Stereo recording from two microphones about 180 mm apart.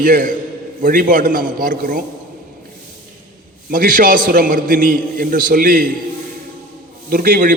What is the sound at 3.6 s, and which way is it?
A man's voice, 50° right (ahead or behind).